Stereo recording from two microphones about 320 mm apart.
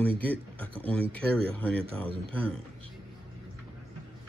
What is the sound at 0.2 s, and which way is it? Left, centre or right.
Speech, centre.